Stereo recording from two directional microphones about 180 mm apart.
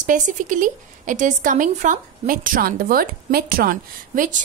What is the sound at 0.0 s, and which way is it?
A woman's voice, 45° right (ahead or behind).